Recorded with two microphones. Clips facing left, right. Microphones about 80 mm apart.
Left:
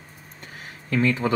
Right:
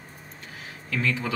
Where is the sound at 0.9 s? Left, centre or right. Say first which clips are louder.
Left 6 dB; left.